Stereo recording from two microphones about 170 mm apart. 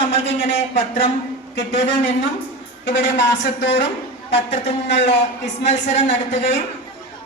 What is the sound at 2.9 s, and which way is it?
Speech, 90° left.